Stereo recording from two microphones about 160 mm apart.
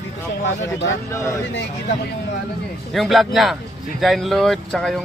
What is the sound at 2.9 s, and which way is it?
Speech, centre (ahead or behind).